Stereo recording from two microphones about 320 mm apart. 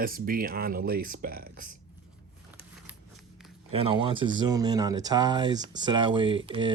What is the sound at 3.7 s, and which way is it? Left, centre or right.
Speech, centre.